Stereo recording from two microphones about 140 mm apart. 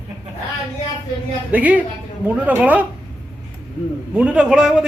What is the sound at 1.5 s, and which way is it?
A man's voice, 10° right (ahead or behind).